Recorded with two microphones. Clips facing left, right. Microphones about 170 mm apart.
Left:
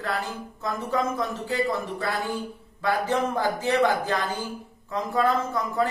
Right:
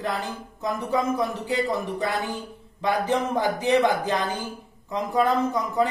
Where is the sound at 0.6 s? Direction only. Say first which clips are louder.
Right 2 dB; 15° right (ahead or behind).